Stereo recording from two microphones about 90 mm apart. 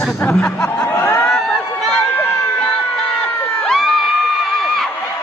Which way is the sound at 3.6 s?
5° left (ahead or behind).